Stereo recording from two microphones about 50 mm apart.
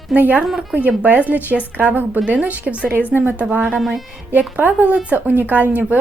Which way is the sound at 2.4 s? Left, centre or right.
Right.